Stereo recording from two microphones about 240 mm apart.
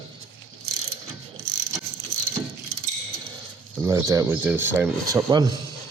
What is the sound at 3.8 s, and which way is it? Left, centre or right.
Speech, centre.